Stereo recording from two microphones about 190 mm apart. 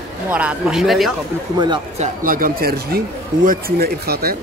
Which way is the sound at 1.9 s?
45° right (ahead or behind).